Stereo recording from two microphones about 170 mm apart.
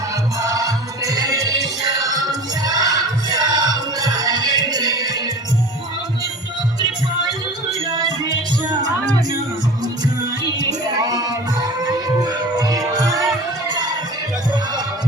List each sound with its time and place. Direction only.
0.3 s music: 20° right (ahead or behind)
7.7 s music: 25° right (ahead or behind)
10.6 s music: 25° right (ahead or behind)